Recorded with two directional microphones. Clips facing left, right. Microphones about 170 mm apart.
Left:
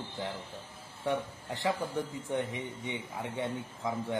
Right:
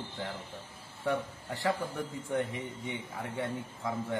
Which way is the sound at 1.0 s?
20° left (ahead or behind).